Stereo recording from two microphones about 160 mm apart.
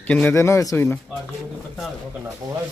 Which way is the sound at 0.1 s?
10° left (ahead or behind).